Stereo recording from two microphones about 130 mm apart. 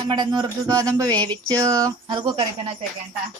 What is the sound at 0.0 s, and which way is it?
A woman's voice, 35° right (ahead or behind).